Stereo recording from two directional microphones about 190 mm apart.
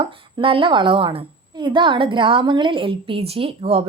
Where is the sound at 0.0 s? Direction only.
25° right (ahead or behind).